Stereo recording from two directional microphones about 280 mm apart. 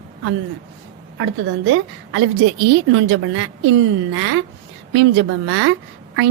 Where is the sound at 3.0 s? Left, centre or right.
Right.